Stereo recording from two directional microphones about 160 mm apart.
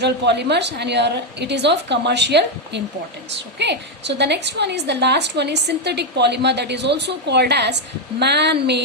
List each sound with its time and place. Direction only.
0.0 s a woman's voice: 90° right